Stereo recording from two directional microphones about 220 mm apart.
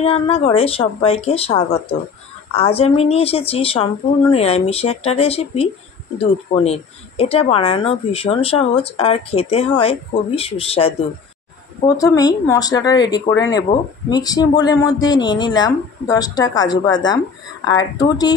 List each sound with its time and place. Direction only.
0.0 s a man's voice: 25° left (ahead or behind)